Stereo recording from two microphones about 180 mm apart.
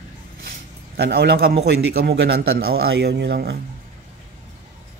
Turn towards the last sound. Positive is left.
turn(degrees=-65)  # may be behind; listen again after turning